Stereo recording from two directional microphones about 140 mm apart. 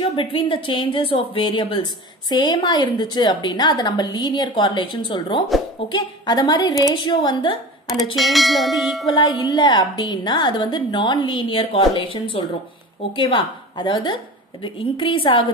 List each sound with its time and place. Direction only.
0.1 s a woman's voice: 40° left (ahead or behind)
8.2 s bell: centre (ahead or behind)
9.0 s a woman's voice: 30° left (ahead or behind)